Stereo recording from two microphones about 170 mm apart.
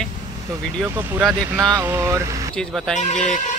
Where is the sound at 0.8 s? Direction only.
10° right (ahead or behind).